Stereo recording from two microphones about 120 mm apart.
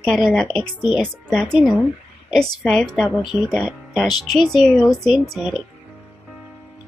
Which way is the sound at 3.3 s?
20° right (ahead or behind).